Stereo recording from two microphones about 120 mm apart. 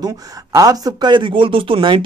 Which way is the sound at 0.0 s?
30° right (ahead or behind).